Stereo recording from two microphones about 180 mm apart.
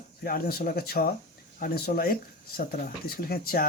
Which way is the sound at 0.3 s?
55° left (ahead or behind).